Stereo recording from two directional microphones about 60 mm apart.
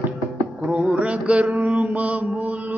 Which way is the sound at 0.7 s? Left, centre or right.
Right.